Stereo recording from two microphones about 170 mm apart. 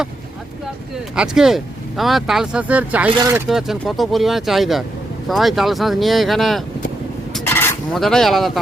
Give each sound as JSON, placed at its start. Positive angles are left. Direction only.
{"t": 1.1, "sound": "speech", "side_deg": -5}
{"t": 3.1, "sound": "speech", "side_deg": -25}
{"t": 3.3, "sound": "speech", "side_deg": 0}
{"t": 7.4, "sound": "a sound", "side_deg": 15}
{"t": 7.9, "sound": "speech", "side_deg": 0}